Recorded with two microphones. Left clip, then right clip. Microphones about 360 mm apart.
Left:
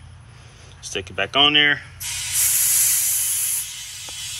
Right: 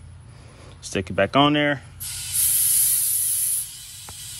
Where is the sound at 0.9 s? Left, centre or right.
Centre.